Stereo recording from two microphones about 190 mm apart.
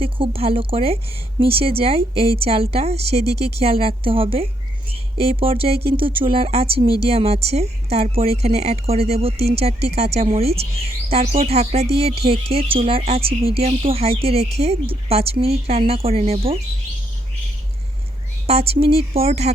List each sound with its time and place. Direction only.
0.0 s speech: 30° right (ahead or behind)
18.4 s speech: 30° right (ahead or behind)